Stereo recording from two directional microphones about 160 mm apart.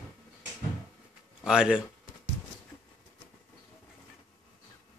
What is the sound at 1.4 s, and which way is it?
Speech, 5° right (ahead or behind).